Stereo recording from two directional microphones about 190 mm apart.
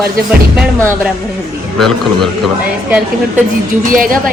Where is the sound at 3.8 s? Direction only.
45° right (ahead or behind).